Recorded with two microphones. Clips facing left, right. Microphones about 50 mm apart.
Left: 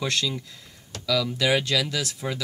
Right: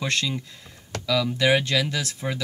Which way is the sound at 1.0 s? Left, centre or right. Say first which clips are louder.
Right 2 dB; centre.